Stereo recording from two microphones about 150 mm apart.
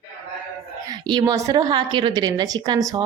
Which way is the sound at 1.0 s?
25° right (ahead or behind).